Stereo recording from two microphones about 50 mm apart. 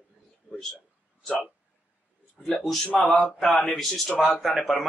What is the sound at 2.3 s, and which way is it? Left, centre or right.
Speech, centre.